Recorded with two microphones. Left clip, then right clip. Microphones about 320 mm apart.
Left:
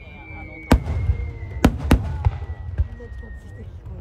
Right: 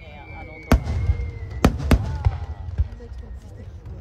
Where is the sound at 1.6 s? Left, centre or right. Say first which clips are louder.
Left 1 dB; centre.